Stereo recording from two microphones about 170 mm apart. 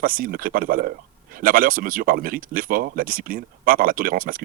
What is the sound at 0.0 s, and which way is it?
Speech, 55° right (ahead or behind).